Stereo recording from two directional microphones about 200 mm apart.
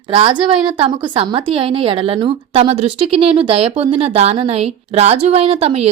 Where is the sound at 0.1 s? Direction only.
25° right (ahead or behind).